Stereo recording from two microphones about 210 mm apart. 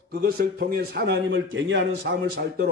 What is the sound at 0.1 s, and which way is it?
A man's voice, 45° right (ahead or behind).